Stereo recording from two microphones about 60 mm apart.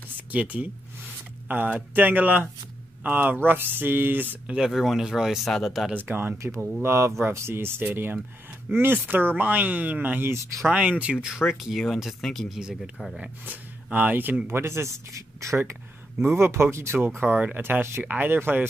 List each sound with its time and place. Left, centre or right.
0.3 s speech: right
2.0 s speech: right
4.5 s speech: centre
5.9 s speech: right
6.3 s speech: right
10.2 s speech: right
10.7 s speech: right
11.4 s speech: centre
12.5 s speech: centre
13.8 s speech: right
14.5 s speech: right
16.2 s speech: right